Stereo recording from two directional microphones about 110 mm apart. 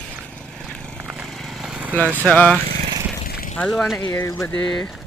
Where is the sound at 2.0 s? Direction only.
15° right (ahead or behind).